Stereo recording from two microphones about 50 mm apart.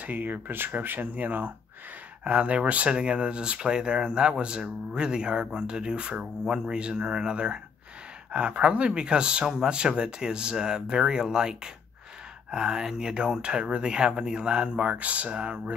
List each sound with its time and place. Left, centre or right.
0.0 s speech: right